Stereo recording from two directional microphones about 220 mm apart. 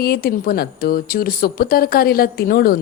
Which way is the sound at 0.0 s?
45° left (ahead or behind).